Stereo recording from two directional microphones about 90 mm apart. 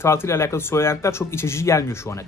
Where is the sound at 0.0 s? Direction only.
30° left (ahead or behind).